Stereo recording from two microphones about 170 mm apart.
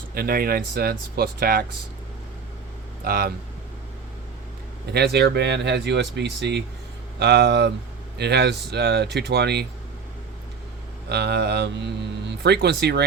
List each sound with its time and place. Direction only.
0.1 s speech: 60° right (ahead or behind)
3.0 s speech: 65° right (ahead or behind)
4.9 s speech: 70° right (ahead or behind)
11.1 s speech: 80° right